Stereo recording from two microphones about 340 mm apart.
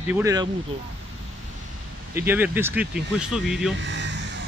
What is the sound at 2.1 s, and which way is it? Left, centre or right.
Speech, centre.